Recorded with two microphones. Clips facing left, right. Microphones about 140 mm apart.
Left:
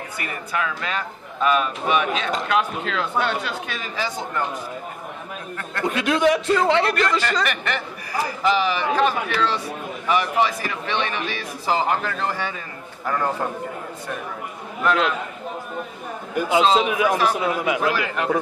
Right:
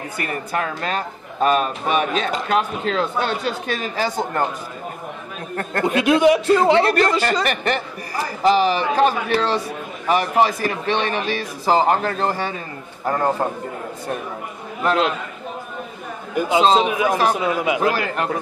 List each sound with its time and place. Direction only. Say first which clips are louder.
0.2 s a man's voice: right 3 dB; 45° right (ahead or behind)
5.6 s a man's voice: right 6 dB; 50° right (ahead or behind)
5.9 s a man's voice: right 4 dB; 10° right (ahead or behind)
6.5 s a man's voice: right 4 dB; 40° right (ahead or behind)
14.8 s a man's voice: right 2 dB; 35° right (ahead or behind)
16.3 s a man's voice: right 1 dB; 5° left (ahead or behind)
16.6 s a man's voice: right 3 dB; 35° right (ahead or behind)